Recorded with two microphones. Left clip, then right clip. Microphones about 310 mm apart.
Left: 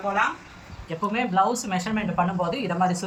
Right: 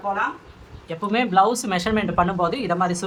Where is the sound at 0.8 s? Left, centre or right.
Centre.